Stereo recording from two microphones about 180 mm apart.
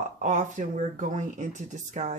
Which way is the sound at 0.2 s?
45° right (ahead or behind).